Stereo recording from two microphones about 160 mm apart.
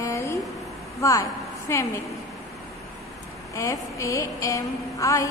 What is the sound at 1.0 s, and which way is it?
Speech, 20° left (ahead or behind).